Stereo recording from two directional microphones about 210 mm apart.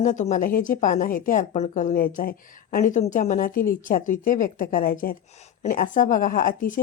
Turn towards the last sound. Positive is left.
turn(degrees=40)  # may be behind; listen again after turning